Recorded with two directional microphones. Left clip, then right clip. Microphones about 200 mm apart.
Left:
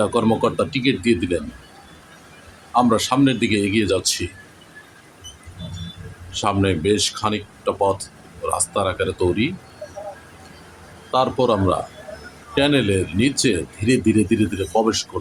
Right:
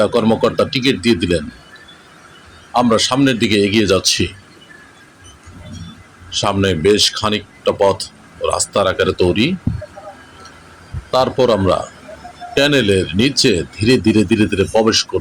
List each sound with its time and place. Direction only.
0.0 s speech: 10° right (ahead or behind)
2.7 s speech: 15° right (ahead or behind)
6.3 s speech: 15° right (ahead or behind)
11.1 s speech: 15° right (ahead or behind)